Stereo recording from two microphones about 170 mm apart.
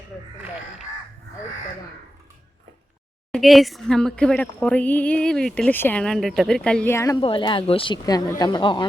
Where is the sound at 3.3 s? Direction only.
Centre (ahead or behind).